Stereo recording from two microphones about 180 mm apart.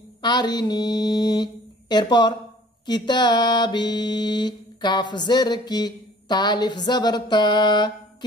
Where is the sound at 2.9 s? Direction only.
25° left (ahead or behind).